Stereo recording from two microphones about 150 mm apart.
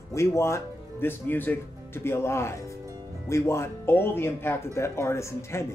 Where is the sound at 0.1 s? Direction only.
20° left (ahead or behind).